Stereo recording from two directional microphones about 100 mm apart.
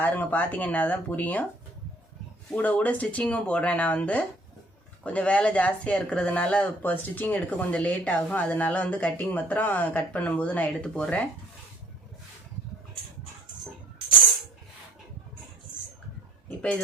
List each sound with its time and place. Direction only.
0.0 s speech: 15° left (ahead or behind)
2.6 s speech: 15° left (ahead or behind)